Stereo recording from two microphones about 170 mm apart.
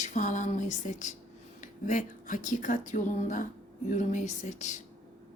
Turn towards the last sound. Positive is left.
turn(degrees=45)  # may be behind; listen again after turning